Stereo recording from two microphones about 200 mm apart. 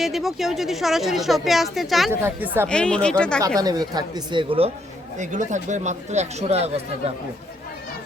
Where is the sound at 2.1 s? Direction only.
10° right (ahead or behind).